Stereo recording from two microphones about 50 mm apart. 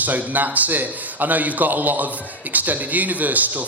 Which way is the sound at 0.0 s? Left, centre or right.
Right.